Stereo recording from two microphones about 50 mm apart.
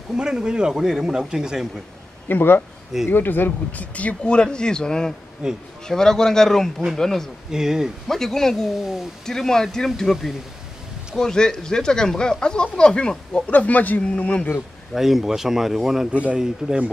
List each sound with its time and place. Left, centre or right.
0.1 s speech: centre
2.2 s speech: left
3.8 s speech: left; by 7.2 s centre
7.5 s speech: centre
8.1 s speech: centre
13.5 s speech: left
15.0 s speech: centre
16.1 s speech: right
16.3 s speech: centre